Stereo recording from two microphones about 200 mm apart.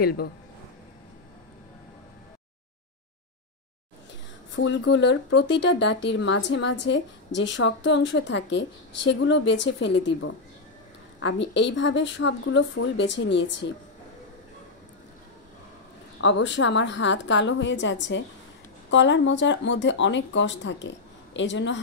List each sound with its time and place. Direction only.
0.0 s speech: 50° left (ahead or behind)
4.6 s speech: 65° left (ahead or behind)
16.2 s speech: 65° left (ahead or behind)